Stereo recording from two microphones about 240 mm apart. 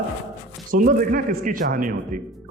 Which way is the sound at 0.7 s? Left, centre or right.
Right.